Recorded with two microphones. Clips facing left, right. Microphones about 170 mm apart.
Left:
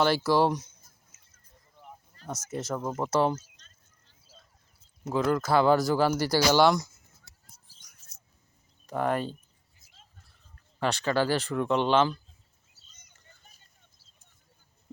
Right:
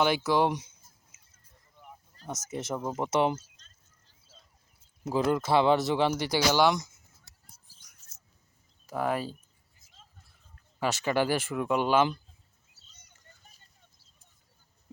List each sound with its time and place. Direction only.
0.0 s speech: 15° right (ahead or behind)
2.2 s a sound: 40° right (ahead or behind)
2.6 s speech: 25° right (ahead or behind)
2.8 s speech: centre (ahead or behind)
3.1 s speech: 20° right (ahead or behind)
5.1 s speech: 25° right (ahead or behind)
8.9 s speech: 5° right (ahead or behind)
10.8 s speech: 10° right (ahead or behind)